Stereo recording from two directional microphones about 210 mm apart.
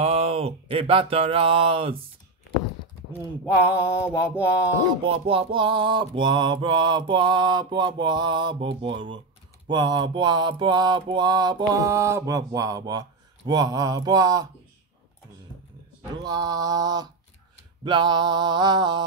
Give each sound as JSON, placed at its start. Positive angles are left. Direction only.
{"t": 0.0, "sound": "mantra", "side_deg": -30}
{"t": 3.7, "sound": "speech", "side_deg": -5}
{"t": 5.0, "sound": "mantra", "side_deg": -25}
{"t": 13.5, "sound": "speech", "side_deg": -20}
{"t": 16.2, "sound": "speech", "side_deg": -15}
{"t": 17.8, "sound": "mantra", "side_deg": -20}